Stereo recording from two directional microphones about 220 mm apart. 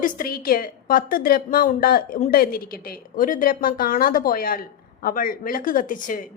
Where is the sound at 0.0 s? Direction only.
40° left (ahead or behind).